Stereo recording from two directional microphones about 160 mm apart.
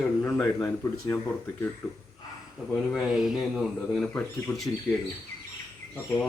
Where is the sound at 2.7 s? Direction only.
Centre (ahead or behind).